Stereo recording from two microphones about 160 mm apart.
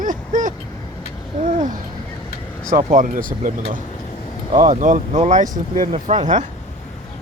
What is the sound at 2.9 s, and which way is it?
Speech, 55° right (ahead or behind).